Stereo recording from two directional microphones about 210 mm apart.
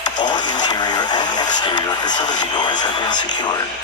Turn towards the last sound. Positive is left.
turn(degrees=20)  # may be behind; listen again after turning